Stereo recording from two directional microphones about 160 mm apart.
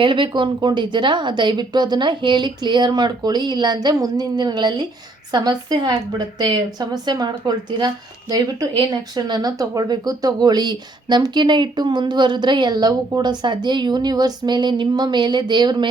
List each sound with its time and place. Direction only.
0.0 s speech: 30° right (ahead or behind)
8.9 s speech: 25° right (ahead or behind)